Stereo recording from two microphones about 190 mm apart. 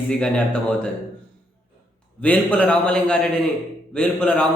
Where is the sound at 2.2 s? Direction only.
5° left (ahead or behind).